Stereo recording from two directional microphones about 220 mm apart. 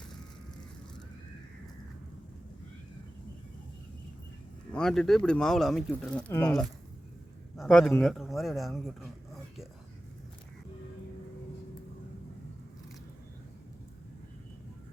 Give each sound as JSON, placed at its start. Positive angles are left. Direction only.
{"t": 4.7, "sound": "speech", "side_deg": 0}